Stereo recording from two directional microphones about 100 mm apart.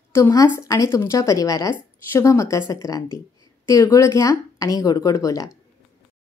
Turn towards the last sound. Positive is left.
turn(degrees=35)  # may be behind; listen again after turning